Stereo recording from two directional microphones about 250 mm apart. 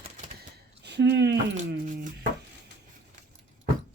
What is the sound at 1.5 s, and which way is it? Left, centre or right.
Speech, right.